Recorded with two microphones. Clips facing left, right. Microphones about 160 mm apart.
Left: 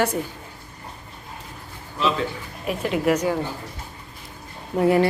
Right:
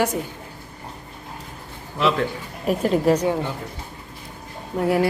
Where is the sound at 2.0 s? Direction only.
70° right (ahead or behind).